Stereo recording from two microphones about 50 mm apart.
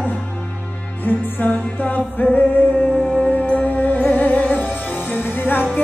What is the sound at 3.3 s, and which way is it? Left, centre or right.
Music, left.